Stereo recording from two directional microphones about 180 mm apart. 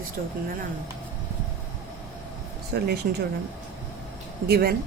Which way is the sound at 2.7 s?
60° right (ahead or behind).